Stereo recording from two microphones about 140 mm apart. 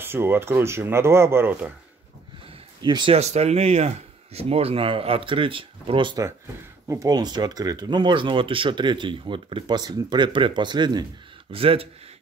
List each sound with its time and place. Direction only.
0.0 s speech: 15° right (ahead or behind)
2.8 s speech: 35° right (ahead or behind)
3.2 s speech: 50° right (ahead or behind)
6.9 s speech: 25° right (ahead or behind)
11.5 s speech: 40° right (ahead or behind)